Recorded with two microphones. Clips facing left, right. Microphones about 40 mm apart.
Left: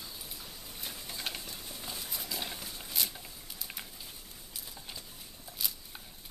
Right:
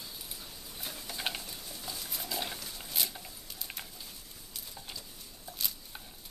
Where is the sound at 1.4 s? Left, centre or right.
Centre.